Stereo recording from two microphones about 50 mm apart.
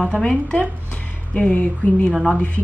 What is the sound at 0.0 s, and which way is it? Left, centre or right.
Speech, centre.